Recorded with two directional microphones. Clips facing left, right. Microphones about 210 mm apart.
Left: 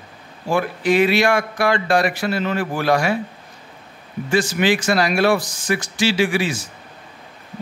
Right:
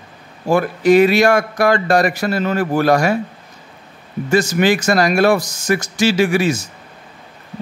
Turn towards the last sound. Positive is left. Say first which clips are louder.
# right 4 dB
turn(degrees=-45)  # may be behind; listen again after turning